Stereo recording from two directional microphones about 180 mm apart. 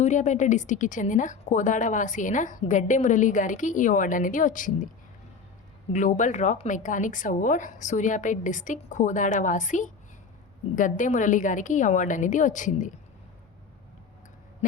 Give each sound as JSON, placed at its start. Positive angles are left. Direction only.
{"t": 0.0, "sound": "a woman's voice", "side_deg": 40}
{"t": 5.9, "sound": "a woman's voice", "side_deg": 45}